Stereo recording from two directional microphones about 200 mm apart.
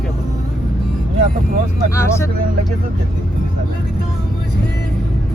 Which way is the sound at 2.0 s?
15° left (ahead or behind).